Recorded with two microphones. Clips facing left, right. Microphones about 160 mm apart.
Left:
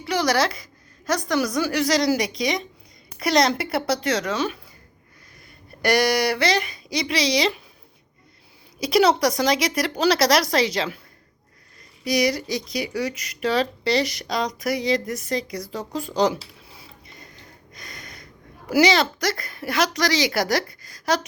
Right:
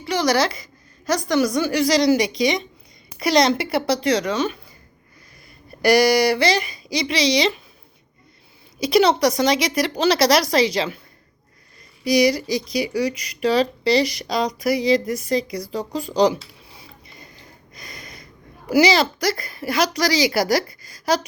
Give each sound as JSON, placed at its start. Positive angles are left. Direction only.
{"t": 0.0, "sound": "a woman's voice", "side_deg": 5}
{"t": 5.8, "sound": "speech", "side_deg": 0}
{"t": 8.8, "sound": "a woman's voice", "side_deg": 5}
{"t": 12.0, "sound": "speech", "side_deg": 0}
{"t": 16.6, "sound": "a sound", "side_deg": 0}
{"t": 18.7, "sound": "speech", "side_deg": 0}